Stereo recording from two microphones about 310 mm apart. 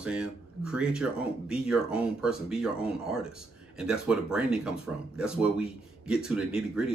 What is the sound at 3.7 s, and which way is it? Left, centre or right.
A woman's voice, centre.